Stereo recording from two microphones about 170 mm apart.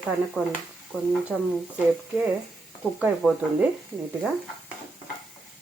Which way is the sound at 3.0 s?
5° right (ahead or behind).